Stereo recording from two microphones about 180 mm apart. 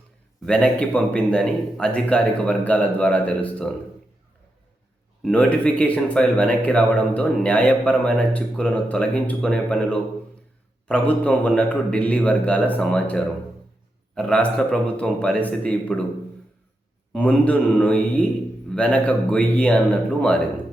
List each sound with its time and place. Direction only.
0.4 s speech: 5° left (ahead or behind)
5.2 s speech: 5° left (ahead or behind)
17.1 s speech: 5° left (ahead or behind)